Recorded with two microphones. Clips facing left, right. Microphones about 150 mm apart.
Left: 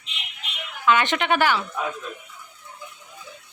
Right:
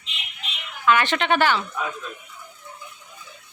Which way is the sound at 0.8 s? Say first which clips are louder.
Even; 20° left (ahead or behind).